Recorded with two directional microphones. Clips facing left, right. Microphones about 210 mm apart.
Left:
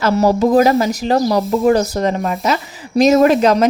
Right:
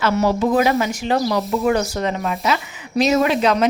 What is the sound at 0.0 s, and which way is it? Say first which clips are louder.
A woman's voice: left 4 dB; 40° left (ahead or behind).